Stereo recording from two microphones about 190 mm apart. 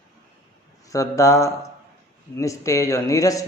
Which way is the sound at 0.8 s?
15° left (ahead or behind).